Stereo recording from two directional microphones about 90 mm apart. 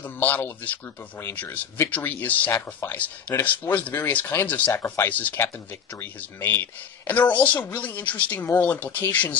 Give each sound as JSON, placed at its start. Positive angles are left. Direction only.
{"t": 0.0, "sound": "a woman's voice", "side_deg": 20}